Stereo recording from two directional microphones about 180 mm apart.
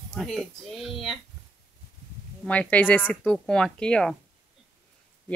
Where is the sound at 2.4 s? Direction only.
10° left (ahead or behind).